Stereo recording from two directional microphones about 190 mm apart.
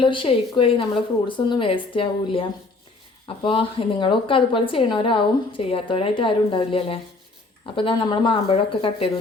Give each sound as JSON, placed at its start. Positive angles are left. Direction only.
{"t": 0.0, "sound": "a woman's voice", "side_deg": 25}